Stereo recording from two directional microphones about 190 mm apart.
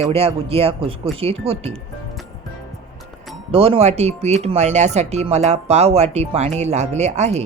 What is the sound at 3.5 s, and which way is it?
Speech, 30° right (ahead or behind).